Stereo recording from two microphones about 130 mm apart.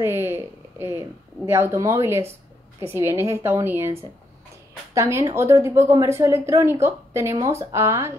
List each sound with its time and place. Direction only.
0.0 s a woman's voice: 20° right (ahead or behind)
4.9 s a woman's voice: 20° right (ahead or behind)